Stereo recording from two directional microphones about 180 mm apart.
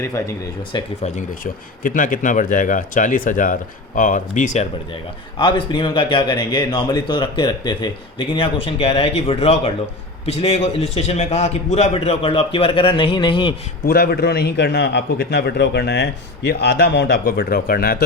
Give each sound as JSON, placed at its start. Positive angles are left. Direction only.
{"t": 1.0, "sound": "speech", "side_deg": 45}
{"t": 5.4, "sound": "a man's voice", "side_deg": 25}
{"t": 13.8, "sound": "a man's voice", "side_deg": 60}